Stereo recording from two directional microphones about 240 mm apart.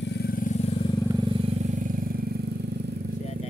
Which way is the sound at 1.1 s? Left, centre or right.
Right.